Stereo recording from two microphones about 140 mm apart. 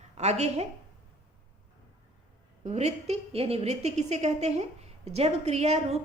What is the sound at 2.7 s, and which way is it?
A woman's voice, 55° right (ahead or behind).